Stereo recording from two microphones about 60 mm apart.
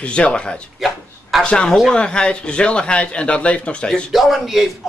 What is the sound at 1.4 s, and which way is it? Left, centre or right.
A man's voice, centre.